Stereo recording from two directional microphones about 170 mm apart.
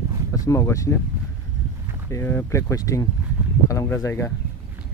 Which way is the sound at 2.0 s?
15° left (ahead or behind).